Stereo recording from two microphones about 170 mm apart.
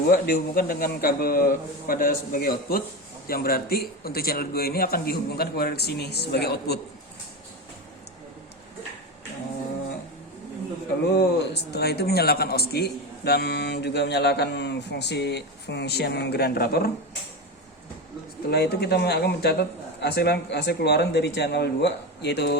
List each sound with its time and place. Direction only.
0.1 s a man's voice: 60° left (ahead or behind)
11.1 s a man's voice: 75° left (ahead or behind)
18.5 s a man's voice: 70° left (ahead or behind)